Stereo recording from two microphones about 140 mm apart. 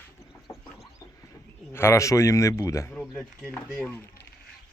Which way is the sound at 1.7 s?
20° left (ahead or behind).